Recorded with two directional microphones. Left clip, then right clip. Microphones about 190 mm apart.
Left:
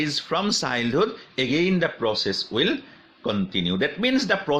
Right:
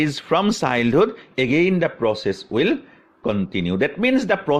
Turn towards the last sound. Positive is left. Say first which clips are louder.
# right 3 dB
turn(degrees=-35)  # may be behind; listen again after turning